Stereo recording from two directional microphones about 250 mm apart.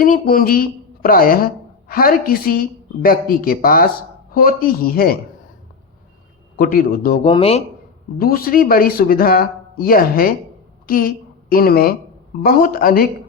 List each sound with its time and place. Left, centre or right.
0.0 s a man's voice: left
6.6 s a man's voice: left
7.3 s speech: left
8.2 s a man's voice: left